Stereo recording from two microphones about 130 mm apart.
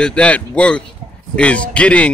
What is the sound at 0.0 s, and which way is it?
A man's voice, 10° left (ahead or behind).